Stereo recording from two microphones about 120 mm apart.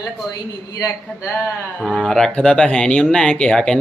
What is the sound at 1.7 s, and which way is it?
Speech, 5° left (ahead or behind).